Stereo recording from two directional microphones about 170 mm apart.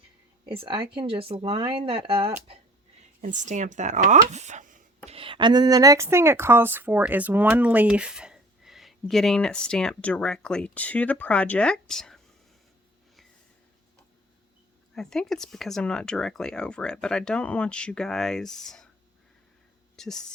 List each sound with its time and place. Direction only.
0.4 s speech: 30° right (ahead or behind)
3.2 s speech: 45° right (ahead or behind)
5.0 s speech: 35° right (ahead or behind); by 12.2 s 5° left (ahead or behind)
14.9 s speech: 5° left (ahead or behind)
20.0 s speech: 5° left (ahead or behind)